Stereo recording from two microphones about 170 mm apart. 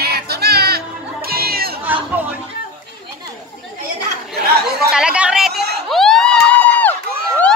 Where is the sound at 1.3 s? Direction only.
65° right (ahead or behind).